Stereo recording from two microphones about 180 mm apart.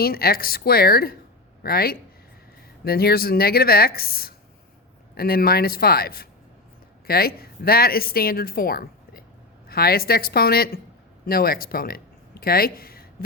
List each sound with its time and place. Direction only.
0.0 s a woman's voice: 55° left (ahead or behind)